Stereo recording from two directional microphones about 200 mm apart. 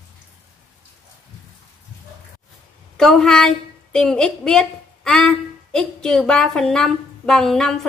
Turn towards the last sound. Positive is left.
turn(degrees=0)  # may be behind; listen again after turning